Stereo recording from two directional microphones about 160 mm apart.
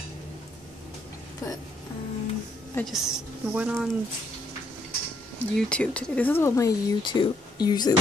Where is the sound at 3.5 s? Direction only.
5° right (ahead or behind).